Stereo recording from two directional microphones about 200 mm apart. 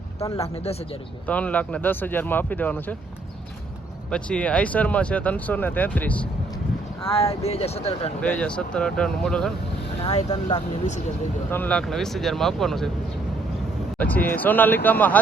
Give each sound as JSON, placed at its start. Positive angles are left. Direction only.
{"t": 0.3, "sound": "speech", "side_deg": 30}
{"t": 1.3, "sound": "speech", "side_deg": 5}
{"t": 4.1, "sound": "speech", "side_deg": 5}
{"t": 7.0, "sound": "speech", "side_deg": 30}
{"t": 8.2, "sound": "speech", "side_deg": 5}
{"t": 10.0, "sound": "speech", "side_deg": 25}
{"t": 11.5, "sound": "speech", "side_deg": 5}
{"t": 14.0, "sound": "speech", "side_deg": 10}